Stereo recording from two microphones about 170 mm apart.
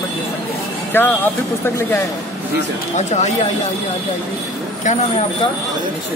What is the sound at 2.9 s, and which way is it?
Speech, 40° left (ahead or behind).